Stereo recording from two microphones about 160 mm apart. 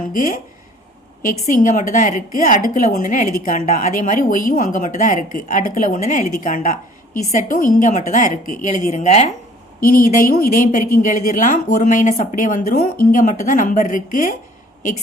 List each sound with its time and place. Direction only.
0.1 s a woman's voice: 60° left (ahead or behind)
10.4 s a woman's voice: 60° left (ahead or behind)